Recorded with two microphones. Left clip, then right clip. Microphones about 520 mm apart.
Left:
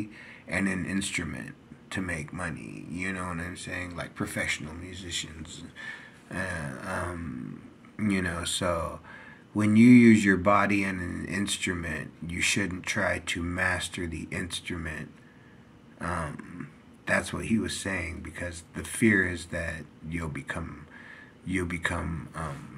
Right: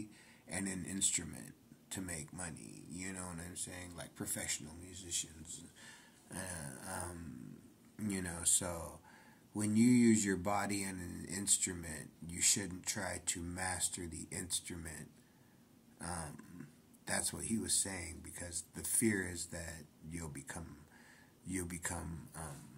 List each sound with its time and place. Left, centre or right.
0.0 s speech: right
16.1 s speech: right